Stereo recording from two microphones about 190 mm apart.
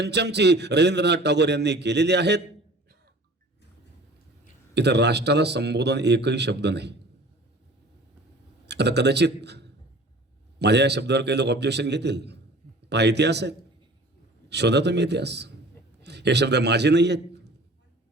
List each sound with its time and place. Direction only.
0.0 s a man's voice: 60° right (ahead or behind)
4.7 s a man's voice: 60° right (ahead or behind)
8.6 s a man's voice: 60° right (ahead or behind)